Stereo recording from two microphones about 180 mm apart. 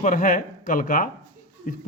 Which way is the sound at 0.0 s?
50° left (ahead or behind).